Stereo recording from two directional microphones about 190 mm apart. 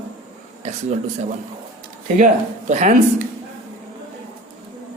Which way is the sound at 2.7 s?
40° right (ahead or behind).